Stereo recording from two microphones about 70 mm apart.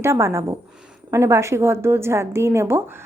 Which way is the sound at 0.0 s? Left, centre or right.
Right.